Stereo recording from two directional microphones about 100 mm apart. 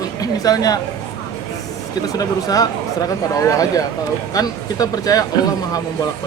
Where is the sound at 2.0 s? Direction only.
35° left (ahead or behind).